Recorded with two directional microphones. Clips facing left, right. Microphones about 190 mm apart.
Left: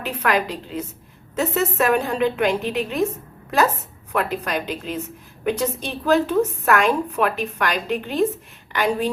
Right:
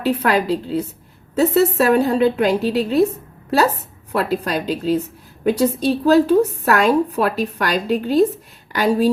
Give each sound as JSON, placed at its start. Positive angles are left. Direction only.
{"t": 0.0, "sound": "a woman's voice", "side_deg": -35}
{"t": 4.1, "sound": "a woman's voice", "side_deg": -35}